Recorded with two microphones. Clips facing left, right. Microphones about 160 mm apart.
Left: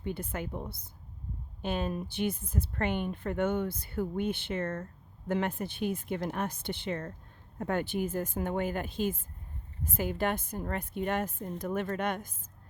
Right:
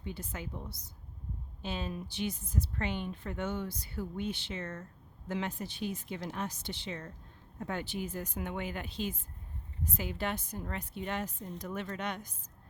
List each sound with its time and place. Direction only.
0.0 s a woman's voice: 55° left (ahead or behind)